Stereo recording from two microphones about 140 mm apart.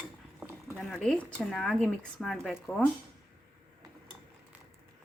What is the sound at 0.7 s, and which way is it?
A woman's voice, 5° left (ahead or behind).